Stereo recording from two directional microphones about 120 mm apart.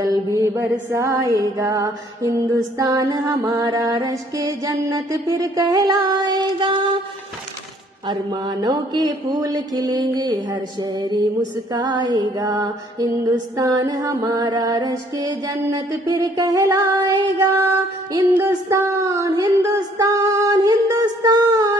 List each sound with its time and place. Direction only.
0.0 s music: 25° right (ahead or behind)
8.1 s music: 35° right (ahead or behind)
18.2 s a sound: 20° right (ahead or behind)